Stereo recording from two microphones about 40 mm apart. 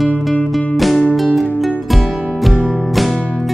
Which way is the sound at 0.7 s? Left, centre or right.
Centre.